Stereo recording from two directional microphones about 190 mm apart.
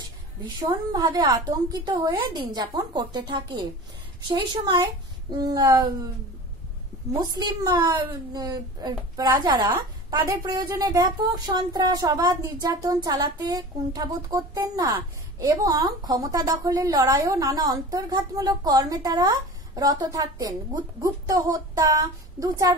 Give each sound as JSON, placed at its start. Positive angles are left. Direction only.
{"t": 0.6, "sound": "speech", "side_deg": -20}
{"t": 7.2, "sound": "speech", "side_deg": -20}